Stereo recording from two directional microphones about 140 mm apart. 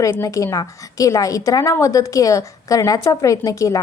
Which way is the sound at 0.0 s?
20° left (ahead or behind).